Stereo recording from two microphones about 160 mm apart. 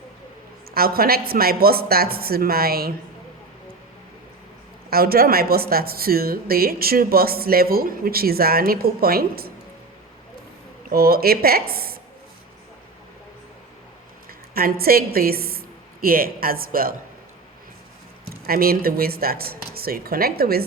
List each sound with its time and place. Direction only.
0.7 s speech: 70° right (ahead or behind)
4.9 s speech: 70° right (ahead or behind)
10.8 s speech: 70° right (ahead or behind)
14.5 s a woman's voice: 70° right (ahead or behind)
18.4 s speech: 70° right (ahead or behind)